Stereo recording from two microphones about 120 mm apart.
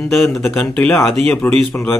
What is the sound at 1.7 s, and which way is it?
Speech, 15° left (ahead or behind).